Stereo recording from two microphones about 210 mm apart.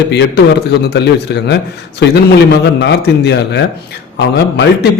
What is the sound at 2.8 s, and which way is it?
Speech, 55° left (ahead or behind).